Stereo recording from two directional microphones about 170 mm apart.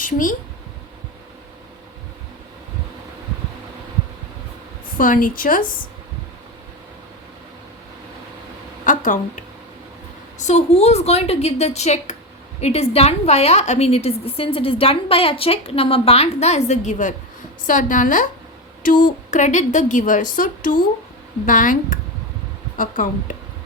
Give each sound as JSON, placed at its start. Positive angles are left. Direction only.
{"t": 0.0, "sound": "speech", "side_deg": 50}
{"t": 4.9, "sound": "a woman's voice", "side_deg": 55}
{"t": 8.9, "sound": "a woman's voice", "side_deg": 50}